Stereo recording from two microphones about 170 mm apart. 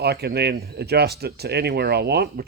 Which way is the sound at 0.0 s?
70° right (ahead or behind).